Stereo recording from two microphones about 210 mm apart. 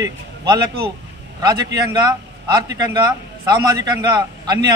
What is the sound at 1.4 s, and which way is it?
A man's voice, 20° right (ahead or behind).